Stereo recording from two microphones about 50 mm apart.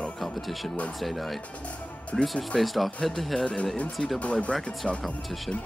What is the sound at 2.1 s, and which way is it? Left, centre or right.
Speech, left.